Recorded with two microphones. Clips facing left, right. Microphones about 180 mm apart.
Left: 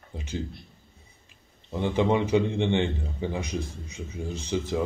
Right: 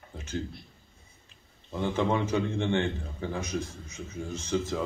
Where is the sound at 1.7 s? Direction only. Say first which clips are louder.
Left 3 dB; 15° left (ahead or behind).